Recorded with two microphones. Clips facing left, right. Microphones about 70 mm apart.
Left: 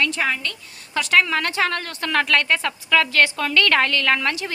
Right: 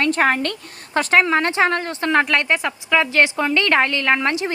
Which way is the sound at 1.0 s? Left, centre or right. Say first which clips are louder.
Right 3 dB; right.